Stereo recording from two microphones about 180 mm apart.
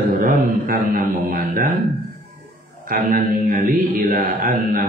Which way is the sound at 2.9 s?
50° right (ahead or behind).